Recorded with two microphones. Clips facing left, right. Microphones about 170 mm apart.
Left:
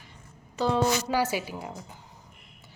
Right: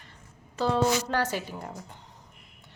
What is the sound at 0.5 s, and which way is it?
A woman's voice, centre (ahead or behind).